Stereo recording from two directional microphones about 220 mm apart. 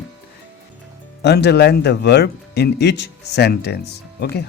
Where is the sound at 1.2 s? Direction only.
50° left (ahead or behind).